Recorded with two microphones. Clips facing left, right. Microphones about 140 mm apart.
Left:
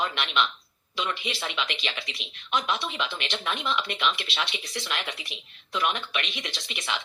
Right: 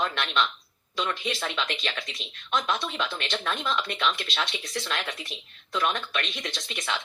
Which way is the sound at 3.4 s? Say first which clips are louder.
Left 1 dB; 10° left (ahead or behind).